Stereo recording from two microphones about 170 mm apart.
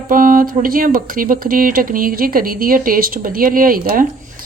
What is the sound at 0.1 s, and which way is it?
Speech, 55° right (ahead or behind).